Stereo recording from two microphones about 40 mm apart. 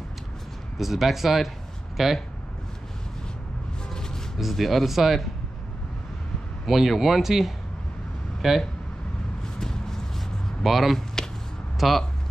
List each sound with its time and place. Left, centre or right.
0.7 s speech: centre
3.9 s a sound: centre
4.4 s speech: centre
6.6 s speech: centre
9.6 s vehicle: centre
10.6 s speech: centre
11.2 s a sound: centre
11.8 s speech: centre